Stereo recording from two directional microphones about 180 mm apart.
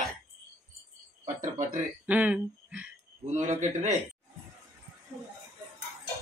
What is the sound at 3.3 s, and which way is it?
Speech, 45° right (ahead or behind).